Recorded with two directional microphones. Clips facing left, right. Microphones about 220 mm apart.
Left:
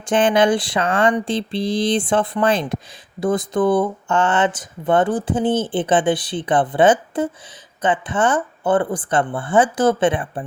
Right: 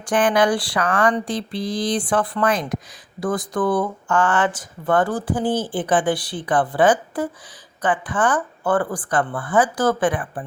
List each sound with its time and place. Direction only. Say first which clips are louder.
0.0 s speech: left 2 dB; 25° left (ahead or behind)